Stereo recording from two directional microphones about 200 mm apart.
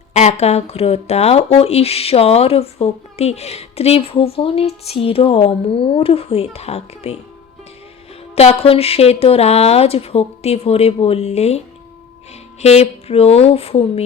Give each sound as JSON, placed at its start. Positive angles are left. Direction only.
{"t": 0.1, "sound": "speech", "side_deg": 35}
{"t": 8.4, "sound": "speech", "side_deg": 30}
{"t": 12.6, "sound": "speech", "side_deg": 30}